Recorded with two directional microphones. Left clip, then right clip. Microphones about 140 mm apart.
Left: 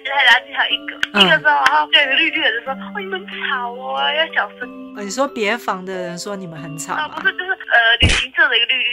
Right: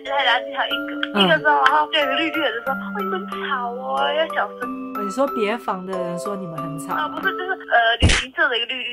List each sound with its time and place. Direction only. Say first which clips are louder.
0.1 s speech: left 6 dB; 35° right (ahead or behind)
5.1 s speech: left 3 dB; 5° left (ahead or behind)
7.0 s speech: left 3 dB; 35° right (ahead or behind)
8.0 s speech: left 4 dB; centre (ahead or behind)
8.4 s speech: left 6 dB; 40° right (ahead or behind)